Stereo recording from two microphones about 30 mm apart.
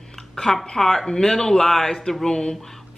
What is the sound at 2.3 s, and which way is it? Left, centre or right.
Speech, left.